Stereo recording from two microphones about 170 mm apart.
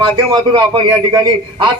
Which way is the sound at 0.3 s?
25° right (ahead or behind).